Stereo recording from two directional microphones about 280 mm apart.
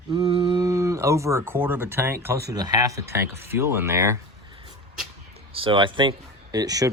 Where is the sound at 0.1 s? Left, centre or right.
Centre.